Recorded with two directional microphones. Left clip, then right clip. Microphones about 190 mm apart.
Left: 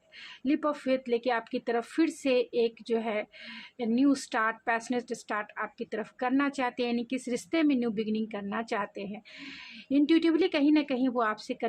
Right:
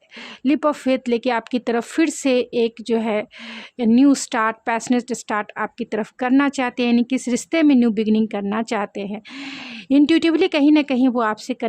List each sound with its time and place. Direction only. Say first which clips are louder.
0.4 s speech: right 10 dB; 50° right (ahead or behind)